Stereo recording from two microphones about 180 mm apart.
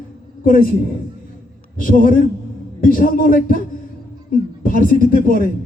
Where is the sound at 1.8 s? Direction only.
50° left (ahead or behind).